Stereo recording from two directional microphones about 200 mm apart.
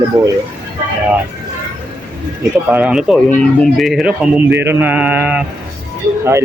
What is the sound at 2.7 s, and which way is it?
Speech, 5° right (ahead or behind).